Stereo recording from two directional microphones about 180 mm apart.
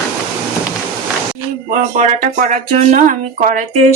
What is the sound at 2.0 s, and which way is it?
Speech, 45° right (ahead or behind).